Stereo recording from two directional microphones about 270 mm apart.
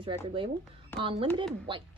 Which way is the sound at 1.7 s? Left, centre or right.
Centre.